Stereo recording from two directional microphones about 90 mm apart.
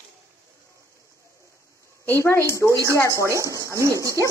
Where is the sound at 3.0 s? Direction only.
35° left (ahead or behind).